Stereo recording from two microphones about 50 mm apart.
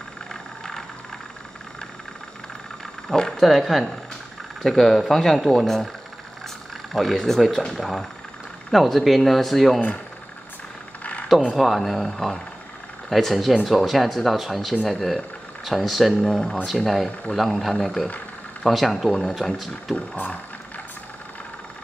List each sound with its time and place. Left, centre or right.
0.3 s vehicle: centre
3.1 s speech: centre
6.9 s speech: centre
11.5 s speech: centre
20.0 s a sound: left